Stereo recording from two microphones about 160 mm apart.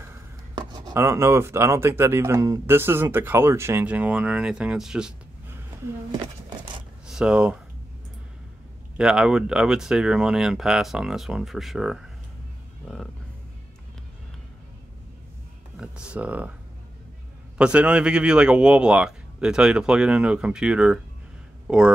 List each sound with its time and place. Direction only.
0.6 s a sound: 25° right (ahead or behind)
0.9 s speech: 15° right (ahead or behind)
6.1 s a sound: 30° right (ahead or behind)
7.1 s speech: 5° right (ahead or behind)
8.9 s speech: 5° right (ahead or behind)
15.8 s speech: 5° right (ahead or behind)
17.6 s speech: 5° right (ahead or behind)